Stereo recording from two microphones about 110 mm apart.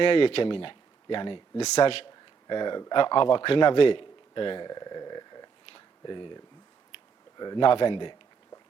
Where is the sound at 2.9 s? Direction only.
50° left (ahead or behind).